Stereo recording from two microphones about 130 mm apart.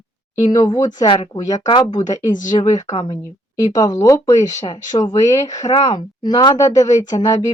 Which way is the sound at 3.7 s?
25° left (ahead or behind).